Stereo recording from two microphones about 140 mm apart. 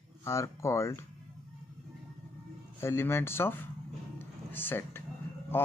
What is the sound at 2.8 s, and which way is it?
Speech, 20° left (ahead or behind).